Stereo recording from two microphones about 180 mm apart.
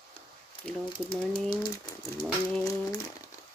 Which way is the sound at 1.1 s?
25° left (ahead or behind).